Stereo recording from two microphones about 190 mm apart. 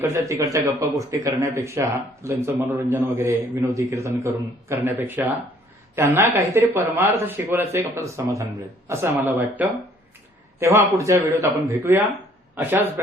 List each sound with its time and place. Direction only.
0.0 s speech: 15° right (ahead or behind)